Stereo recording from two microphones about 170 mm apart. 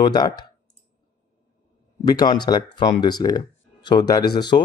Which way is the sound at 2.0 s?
25° left (ahead or behind).